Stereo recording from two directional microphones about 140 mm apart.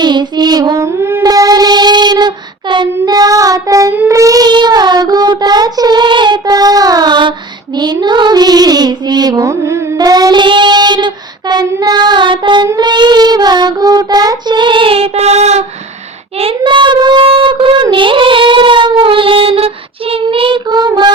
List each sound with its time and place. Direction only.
0.0 s music: 30° right (ahead or behind)
4.0 s child singing: 20° right (ahead or behind); by 15.6 s 50° right (ahead or behind)
16.4 s a sound: 40° right (ahead or behind)
17.9 s child singing: 35° right (ahead or behind)